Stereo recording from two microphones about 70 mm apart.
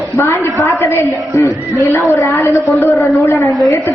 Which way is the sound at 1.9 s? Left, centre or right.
Left.